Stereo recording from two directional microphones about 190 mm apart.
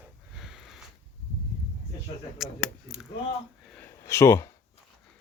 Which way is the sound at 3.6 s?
5° left (ahead or behind).